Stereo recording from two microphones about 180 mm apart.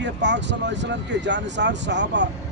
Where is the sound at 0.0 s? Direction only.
75° right (ahead or behind).